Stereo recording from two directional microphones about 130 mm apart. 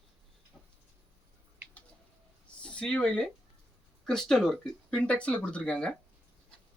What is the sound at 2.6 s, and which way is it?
Speech, 5° left (ahead or behind).